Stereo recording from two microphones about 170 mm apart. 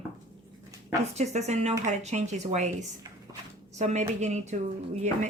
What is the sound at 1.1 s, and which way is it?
A woman's voice, 40° right (ahead or behind).